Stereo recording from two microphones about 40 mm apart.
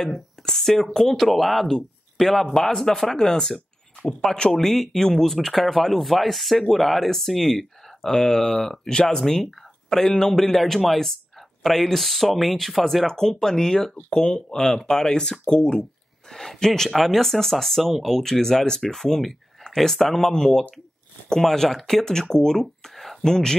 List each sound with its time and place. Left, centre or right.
0.0 s speech: centre
13.0 s speech: centre